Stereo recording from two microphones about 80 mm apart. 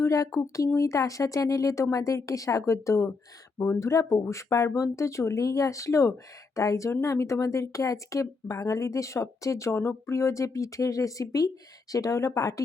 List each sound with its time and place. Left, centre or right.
0.0 s speech: left